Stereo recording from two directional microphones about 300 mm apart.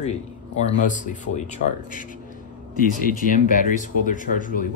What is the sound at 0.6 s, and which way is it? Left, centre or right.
Speech, left.